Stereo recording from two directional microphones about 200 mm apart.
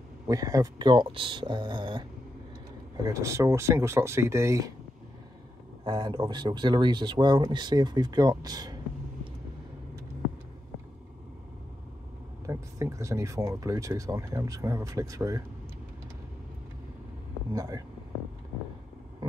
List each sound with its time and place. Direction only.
0.3 s speech: 15° right (ahead or behind)
5.9 s speech: 25° right (ahead or behind)
12.4 s speech: 15° right (ahead or behind)
17.5 s a sound: 15° right (ahead or behind)